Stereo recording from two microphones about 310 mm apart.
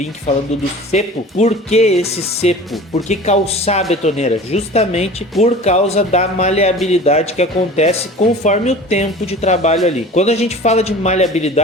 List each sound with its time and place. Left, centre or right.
0.3 s speech: left